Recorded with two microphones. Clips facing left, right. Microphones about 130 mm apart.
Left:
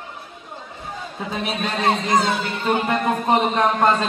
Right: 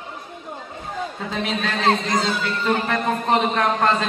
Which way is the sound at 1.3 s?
15° left (ahead or behind).